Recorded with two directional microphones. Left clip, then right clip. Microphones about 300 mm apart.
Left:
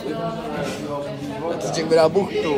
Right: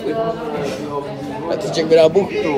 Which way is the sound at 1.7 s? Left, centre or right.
Centre.